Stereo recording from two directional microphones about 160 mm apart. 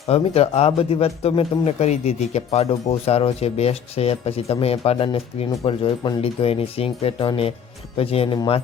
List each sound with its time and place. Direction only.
0.1 s speech: 40° left (ahead or behind)